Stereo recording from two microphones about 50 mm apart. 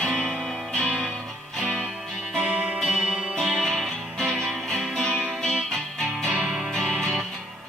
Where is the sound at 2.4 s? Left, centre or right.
Centre.